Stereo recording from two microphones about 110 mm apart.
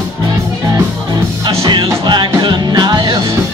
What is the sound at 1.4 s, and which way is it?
Music, 45° right (ahead or behind).